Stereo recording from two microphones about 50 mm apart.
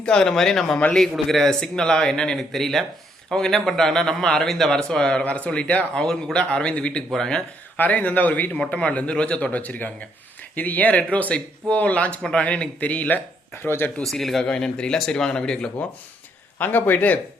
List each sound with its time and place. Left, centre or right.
0.0 s speech: centre
5.2 s speech: left
7.8 s speech: left
13.7 s speech: left
14.0 s speech: centre
14.5 s speech: centre
16.6 s speech: left